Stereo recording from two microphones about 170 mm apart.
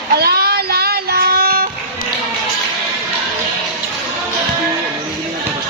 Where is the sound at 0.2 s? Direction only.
65° right (ahead or behind).